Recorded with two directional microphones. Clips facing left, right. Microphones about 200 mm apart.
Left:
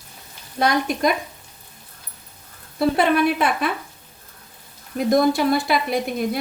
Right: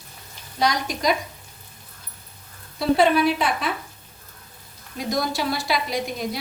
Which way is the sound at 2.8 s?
55° left (ahead or behind).